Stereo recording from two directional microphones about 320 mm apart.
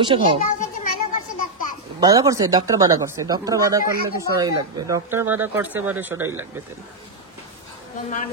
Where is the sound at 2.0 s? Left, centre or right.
Centre.